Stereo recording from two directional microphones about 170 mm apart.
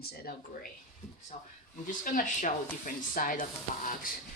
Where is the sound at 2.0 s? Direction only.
50° left (ahead or behind).